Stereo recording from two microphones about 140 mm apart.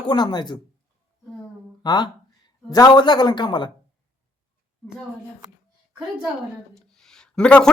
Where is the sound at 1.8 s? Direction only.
30° left (ahead or behind).